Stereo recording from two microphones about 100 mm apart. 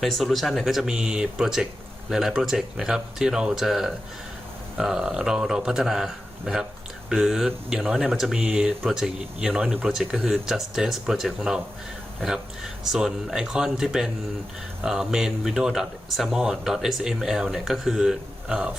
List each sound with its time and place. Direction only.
0.0 s speech: centre (ahead or behind)
12.9 s speech: 5° right (ahead or behind)